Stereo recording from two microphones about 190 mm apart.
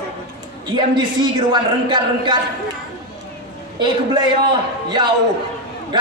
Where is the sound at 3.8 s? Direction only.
25° right (ahead or behind).